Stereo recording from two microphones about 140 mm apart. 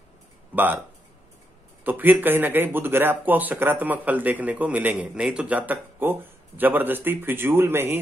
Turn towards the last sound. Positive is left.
turn(degrees=-15)  # may be behind; listen again after turning